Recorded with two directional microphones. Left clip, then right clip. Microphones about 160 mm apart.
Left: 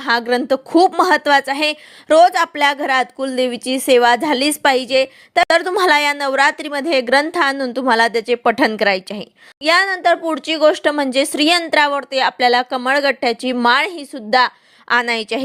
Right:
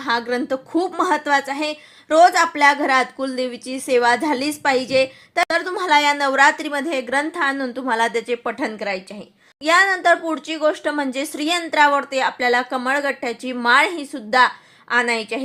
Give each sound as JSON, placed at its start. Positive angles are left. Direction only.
{"t": 0.0, "sound": "a woman's voice", "side_deg": 40}
{"t": 9.6, "sound": "speech", "side_deg": 40}